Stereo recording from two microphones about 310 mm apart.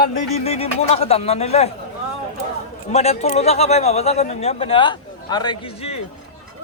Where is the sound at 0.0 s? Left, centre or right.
Centre.